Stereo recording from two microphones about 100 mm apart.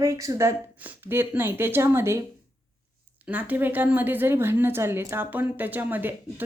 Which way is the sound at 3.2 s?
15° right (ahead or behind).